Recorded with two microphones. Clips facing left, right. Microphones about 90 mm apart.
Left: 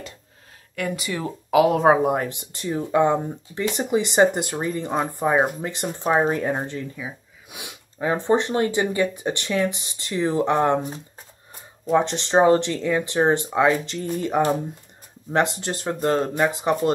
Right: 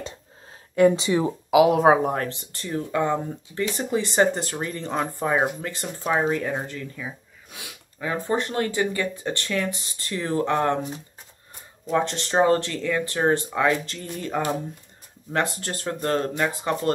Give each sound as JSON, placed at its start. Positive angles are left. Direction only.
{"t": 0.7, "sound": "speech", "side_deg": -25}
{"t": 1.5, "sound": "speech", "side_deg": -5}
{"t": 2.0, "sound": "speech", "side_deg": 15}
{"t": 7.0, "sound": "speech", "side_deg": 10}
{"t": 11.9, "sound": "speech", "side_deg": 20}